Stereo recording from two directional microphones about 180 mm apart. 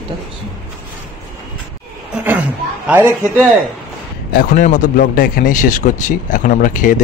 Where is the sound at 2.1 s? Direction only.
5° right (ahead or behind).